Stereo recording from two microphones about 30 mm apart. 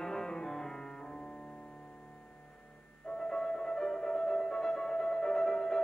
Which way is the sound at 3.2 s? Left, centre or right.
Left.